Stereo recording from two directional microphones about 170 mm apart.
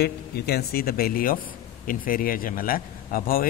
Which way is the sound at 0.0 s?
70° left (ahead or behind).